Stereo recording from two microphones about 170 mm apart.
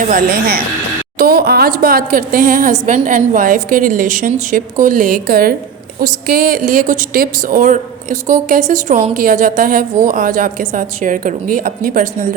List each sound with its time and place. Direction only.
0.1 s a woman's voice: 55° right (ahead or behind)
9.1 s a woman's voice: 55° right (ahead or behind)